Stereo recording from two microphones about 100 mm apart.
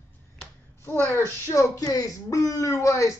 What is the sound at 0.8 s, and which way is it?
Speech, 20° left (ahead or behind).